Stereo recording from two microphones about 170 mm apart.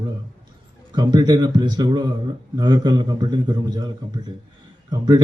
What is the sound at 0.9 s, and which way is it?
Speech, 25° right (ahead or behind).